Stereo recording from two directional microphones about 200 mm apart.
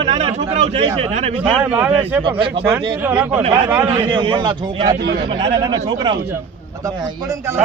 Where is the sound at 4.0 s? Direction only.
25° right (ahead or behind).